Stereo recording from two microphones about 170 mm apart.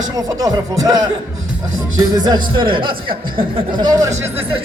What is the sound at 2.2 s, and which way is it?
Speech, 25° right (ahead or behind).